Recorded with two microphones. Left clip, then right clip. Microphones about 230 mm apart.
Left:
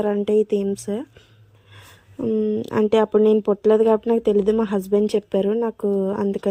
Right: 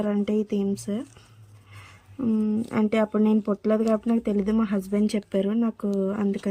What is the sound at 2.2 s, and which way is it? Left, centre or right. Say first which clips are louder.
Speech: left 6 dB; centre.